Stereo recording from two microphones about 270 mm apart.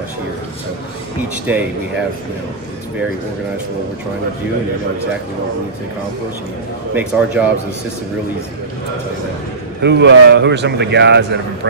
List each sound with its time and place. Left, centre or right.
1.5 s speech: centre
6.9 s speech: centre
9.8 s a man's voice: right